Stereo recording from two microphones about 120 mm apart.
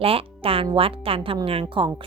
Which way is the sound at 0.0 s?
50° right (ahead or behind).